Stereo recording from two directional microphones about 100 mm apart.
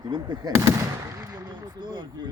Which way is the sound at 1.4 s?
50° right (ahead or behind).